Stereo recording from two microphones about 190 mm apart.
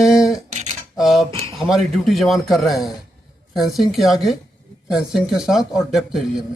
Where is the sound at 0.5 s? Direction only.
35° right (ahead or behind).